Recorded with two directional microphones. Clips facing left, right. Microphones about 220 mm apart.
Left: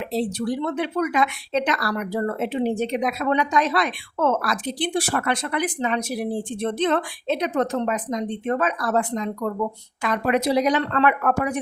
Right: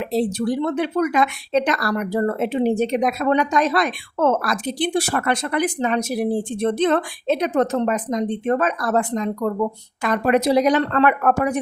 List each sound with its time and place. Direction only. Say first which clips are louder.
0.0 s speech: right 4 dB; 45° right (ahead or behind)